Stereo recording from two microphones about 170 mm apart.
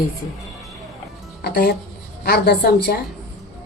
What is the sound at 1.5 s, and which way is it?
A woman's voice, 70° left (ahead or behind).